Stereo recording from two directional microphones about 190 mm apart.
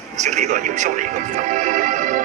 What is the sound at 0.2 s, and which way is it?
Speech, 40° right (ahead or behind).